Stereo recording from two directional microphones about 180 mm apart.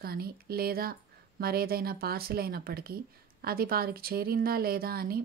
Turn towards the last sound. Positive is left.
turn(degrees=-60)  # may be behind; listen again after turning